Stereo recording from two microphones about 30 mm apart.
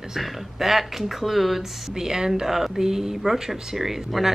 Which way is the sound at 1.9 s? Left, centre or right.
Right.